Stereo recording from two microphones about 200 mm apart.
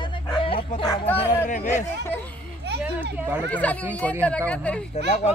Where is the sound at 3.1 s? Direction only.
10° right (ahead or behind).